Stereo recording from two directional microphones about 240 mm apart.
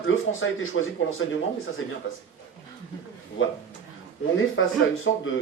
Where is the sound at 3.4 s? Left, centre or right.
Left.